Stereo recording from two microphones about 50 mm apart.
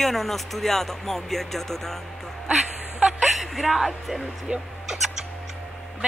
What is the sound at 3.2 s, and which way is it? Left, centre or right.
A woman's voice, centre.